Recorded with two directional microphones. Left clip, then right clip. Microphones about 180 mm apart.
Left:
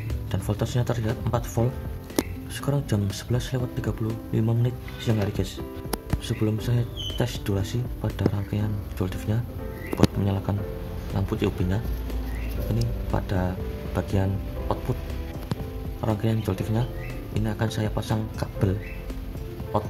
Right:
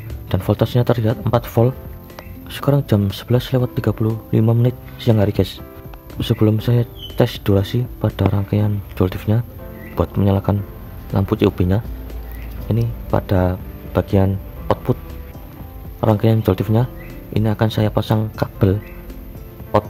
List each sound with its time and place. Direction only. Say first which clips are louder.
0.3 s speech: right 11 dB; 45° right (ahead or behind)
13.1 s speech: right 11 dB; 45° right (ahead or behind)
16.0 s speech: right 11 dB; 55° right (ahead or behind)